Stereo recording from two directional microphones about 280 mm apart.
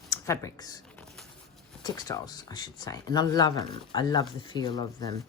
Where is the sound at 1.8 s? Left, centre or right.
Centre.